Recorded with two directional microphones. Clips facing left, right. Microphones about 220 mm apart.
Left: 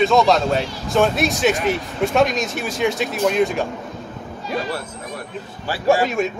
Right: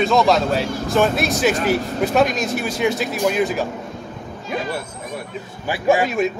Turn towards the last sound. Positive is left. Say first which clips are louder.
# right 1 dB
turn(degrees=0)  # may be behind; listen again after turning